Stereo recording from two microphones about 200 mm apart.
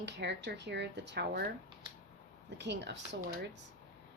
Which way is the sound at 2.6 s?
60° right (ahead or behind).